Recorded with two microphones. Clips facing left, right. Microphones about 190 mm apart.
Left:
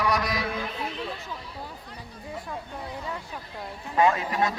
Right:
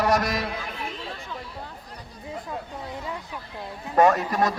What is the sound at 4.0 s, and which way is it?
Speech, 45° right (ahead or behind).